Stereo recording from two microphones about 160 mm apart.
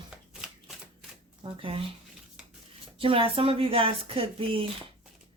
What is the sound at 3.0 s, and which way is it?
Speech, 35° right (ahead or behind).